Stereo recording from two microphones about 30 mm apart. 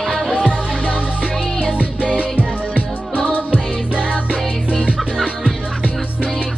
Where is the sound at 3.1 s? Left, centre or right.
Left.